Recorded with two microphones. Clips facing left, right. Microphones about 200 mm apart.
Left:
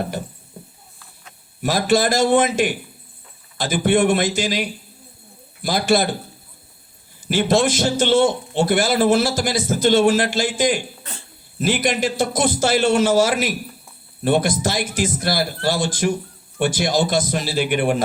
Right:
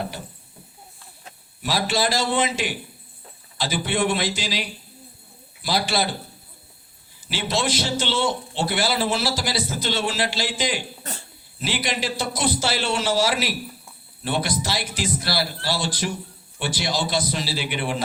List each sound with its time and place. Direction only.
0.6 s a sound: 50° left (ahead or behind)
1.6 s a man's voice: 50° left (ahead or behind)
7.2 s a man's voice: 50° left (ahead or behind)